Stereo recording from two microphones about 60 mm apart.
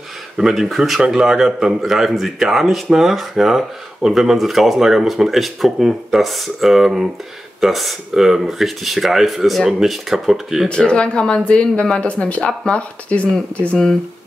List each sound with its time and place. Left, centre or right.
0.4 s speech: centre
10.7 s speech: centre